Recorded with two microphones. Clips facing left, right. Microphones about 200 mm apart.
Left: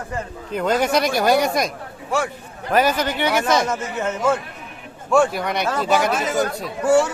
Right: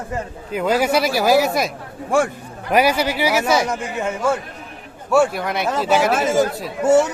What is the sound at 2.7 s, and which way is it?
A man's voice, 10° right (ahead or behind).